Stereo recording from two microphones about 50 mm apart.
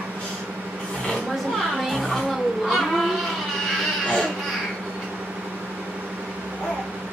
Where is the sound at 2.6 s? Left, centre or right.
Centre.